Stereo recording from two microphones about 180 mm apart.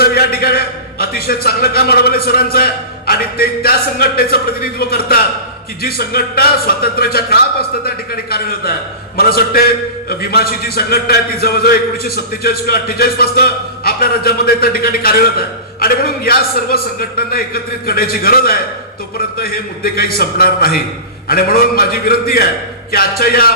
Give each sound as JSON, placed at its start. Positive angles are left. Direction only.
{"t": 0.0, "sound": "a man's voice", "side_deg": 60}